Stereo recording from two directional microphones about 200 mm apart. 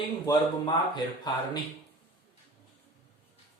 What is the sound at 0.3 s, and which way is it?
A man's voice, 20° left (ahead or behind).